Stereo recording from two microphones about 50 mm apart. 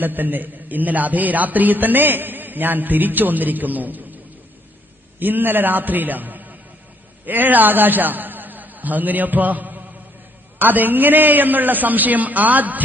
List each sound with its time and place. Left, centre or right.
0.0 s a man's voice: right
5.2 s a man's voice: right